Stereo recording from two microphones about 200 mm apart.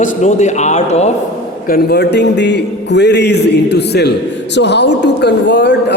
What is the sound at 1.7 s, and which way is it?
A man's voice, 50° left (ahead or behind).